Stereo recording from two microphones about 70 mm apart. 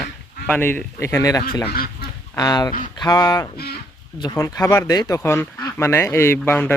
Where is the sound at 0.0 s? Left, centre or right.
Left.